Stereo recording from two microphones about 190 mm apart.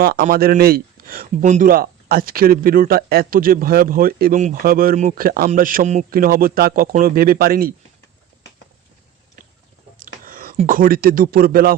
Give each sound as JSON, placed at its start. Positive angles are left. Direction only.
{"t": 0.0, "sound": "speech", "side_deg": -55}
{"t": 10.2, "sound": "a sound", "side_deg": -45}
{"t": 10.7, "sound": "speech", "side_deg": -50}